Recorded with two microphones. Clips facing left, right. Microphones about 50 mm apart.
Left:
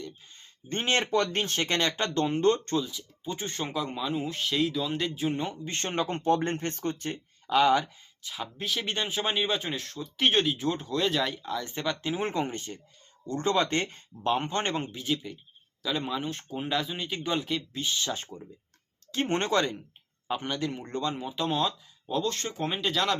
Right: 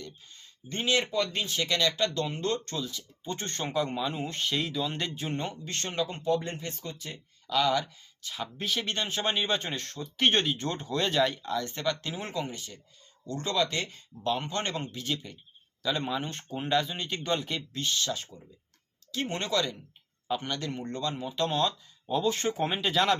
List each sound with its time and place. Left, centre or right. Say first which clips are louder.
0.3 s speech: left 2 dB; left
1.1 s speech: left 3 dB; left
2.8 s speech: left 1 dB; centre
5.6 s a man's voice: left 2 dB; left
6.1 s speech: left 3 dB; left
7.5 s a man's voice: left 4 dB; left
8.2 s a man's voice: even; centre; by 15.0 s left
15.0 s speech: left 3 dB; centre
18.1 s speech: left 1 dB; left
20.2 s speech: left 1 dB; left
22.0 s speech: right 2 dB; centre
22.7 s speech: even; centre